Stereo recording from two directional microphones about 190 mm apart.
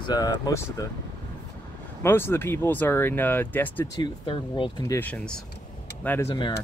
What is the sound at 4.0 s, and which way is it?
Speech, 25° left (ahead or behind).